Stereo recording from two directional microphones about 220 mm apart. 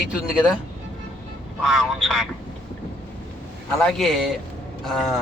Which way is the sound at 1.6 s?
Centre (ahead or behind).